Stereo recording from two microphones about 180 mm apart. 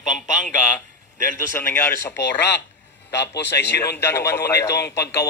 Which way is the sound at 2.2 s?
70° left (ahead or behind).